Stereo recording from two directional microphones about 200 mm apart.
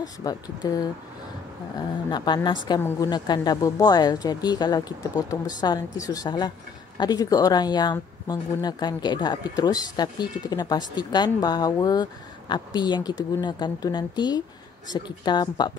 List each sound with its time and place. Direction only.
0.0 s speech: 20° left (ahead or behind)
2.0 s speech: 20° left (ahead or behind)